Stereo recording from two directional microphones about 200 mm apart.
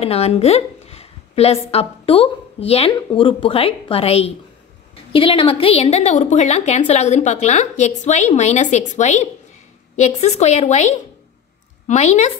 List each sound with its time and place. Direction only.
0.0 s a woman's voice: 30° left (ahead or behind)
11.9 s a woman's voice: 35° left (ahead or behind)